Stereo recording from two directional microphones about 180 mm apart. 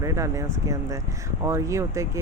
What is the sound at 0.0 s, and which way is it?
Speech, 15° right (ahead or behind).